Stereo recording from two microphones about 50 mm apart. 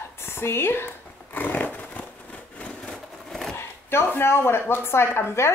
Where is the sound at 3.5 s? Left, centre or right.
Left.